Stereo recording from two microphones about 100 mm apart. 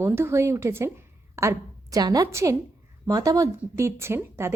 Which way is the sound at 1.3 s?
30° right (ahead or behind).